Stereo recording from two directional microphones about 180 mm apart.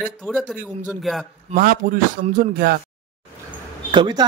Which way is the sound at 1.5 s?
55° right (ahead or behind).